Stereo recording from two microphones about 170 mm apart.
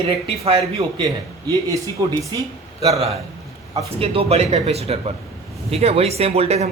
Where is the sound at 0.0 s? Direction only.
35° right (ahead or behind).